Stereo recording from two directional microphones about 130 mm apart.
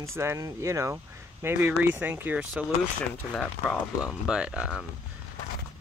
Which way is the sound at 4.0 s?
5° right (ahead or behind).